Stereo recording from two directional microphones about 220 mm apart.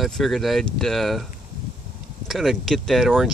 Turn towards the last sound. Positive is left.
turn(degrees=0)  # may be behind; listen again after turning